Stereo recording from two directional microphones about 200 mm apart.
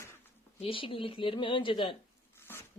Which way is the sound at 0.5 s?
25° left (ahead or behind).